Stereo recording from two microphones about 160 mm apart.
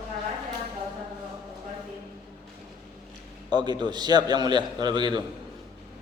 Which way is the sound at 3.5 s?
25° right (ahead or behind).